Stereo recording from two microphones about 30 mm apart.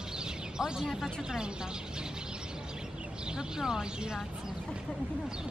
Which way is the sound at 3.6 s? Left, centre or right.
Centre.